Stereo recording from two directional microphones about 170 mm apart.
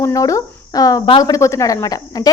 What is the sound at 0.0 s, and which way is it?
A woman's voice, 20° left (ahead or behind).